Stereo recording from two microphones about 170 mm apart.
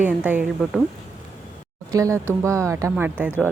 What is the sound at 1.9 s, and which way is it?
Speech, 20° right (ahead or behind).